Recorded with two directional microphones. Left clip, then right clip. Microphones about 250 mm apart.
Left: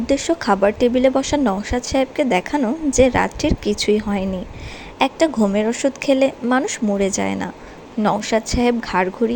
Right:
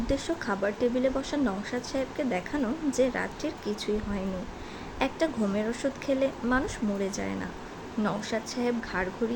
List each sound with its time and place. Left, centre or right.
0.1 s speech: left